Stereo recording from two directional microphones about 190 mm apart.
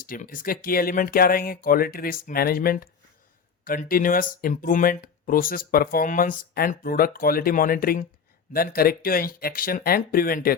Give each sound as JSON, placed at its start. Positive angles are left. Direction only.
{"t": 0.0, "sound": "speech", "side_deg": 50}